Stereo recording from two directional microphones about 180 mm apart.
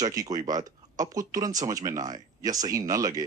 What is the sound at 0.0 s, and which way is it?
Speech, 20° right (ahead or behind).